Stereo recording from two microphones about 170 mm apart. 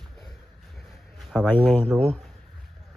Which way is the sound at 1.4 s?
10° left (ahead or behind).